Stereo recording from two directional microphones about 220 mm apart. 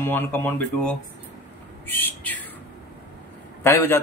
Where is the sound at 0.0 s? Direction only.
10° left (ahead or behind).